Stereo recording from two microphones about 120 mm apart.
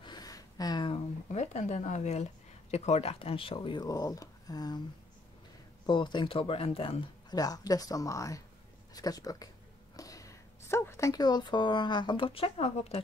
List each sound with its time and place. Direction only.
0.0 s a sound: 35° left (ahead or behind)
1.3 s a woman's voice: 70° left (ahead or behind); by 4.8 s 35° left (ahead or behind)
5.9 s speech: 40° left (ahead or behind)
7.3 s speech: 30° left (ahead or behind); by 13.0 s 60° left (ahead or behind)